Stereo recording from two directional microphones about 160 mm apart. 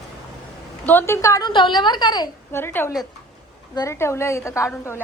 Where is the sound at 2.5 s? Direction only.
15° left (ahead or behind).